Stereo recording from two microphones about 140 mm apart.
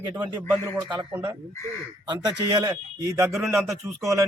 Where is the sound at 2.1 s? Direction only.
30° right (ahead or behind).